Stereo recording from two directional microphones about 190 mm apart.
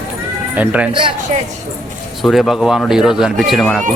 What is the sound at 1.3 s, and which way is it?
Speech, 35° right (ahead or behind).